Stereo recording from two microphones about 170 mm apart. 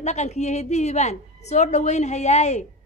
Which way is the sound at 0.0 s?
40° left (ahead or behind).